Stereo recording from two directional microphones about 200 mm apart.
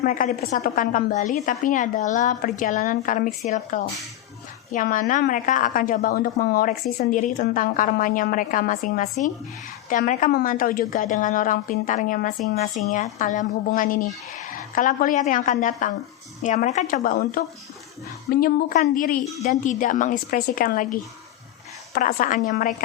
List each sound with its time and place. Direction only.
0.0 s a woman's voice: 45° left (ahead or behind)